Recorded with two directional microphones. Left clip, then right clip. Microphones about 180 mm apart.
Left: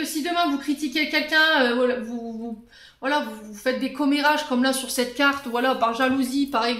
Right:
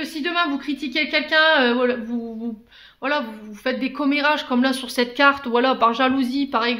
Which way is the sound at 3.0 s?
35° right (ahead or behind).